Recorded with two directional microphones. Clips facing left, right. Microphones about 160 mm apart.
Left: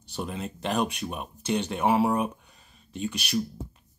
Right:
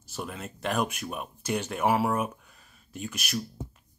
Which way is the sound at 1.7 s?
25° left (ahead or behind).